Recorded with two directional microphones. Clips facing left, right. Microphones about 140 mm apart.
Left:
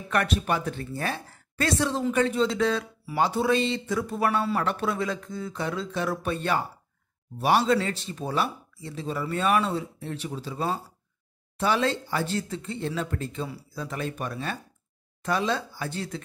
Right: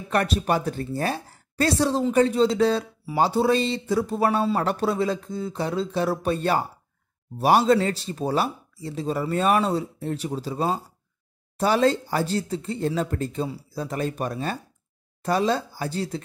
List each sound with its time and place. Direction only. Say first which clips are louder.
0.1 s speech: right 3 dB; 35° right (ahead or behind)